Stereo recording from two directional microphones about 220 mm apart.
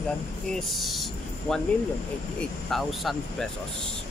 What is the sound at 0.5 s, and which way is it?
Speech, centre (ahead or behind).